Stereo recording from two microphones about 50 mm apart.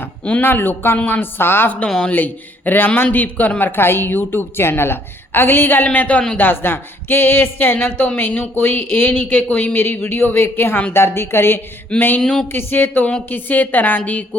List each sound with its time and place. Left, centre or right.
0.4 s a woman's voice: left
2.0 s speech: left
3.7 s a woman's voice: left
11.9 s a woman's voice: left